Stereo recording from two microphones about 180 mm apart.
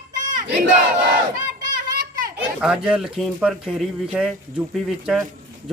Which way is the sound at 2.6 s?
5° right (ahead or behind).